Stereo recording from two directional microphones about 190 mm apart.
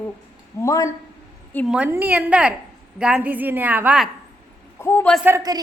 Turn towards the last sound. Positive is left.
turn(degrees=-15)  # may be behind; listen again after turning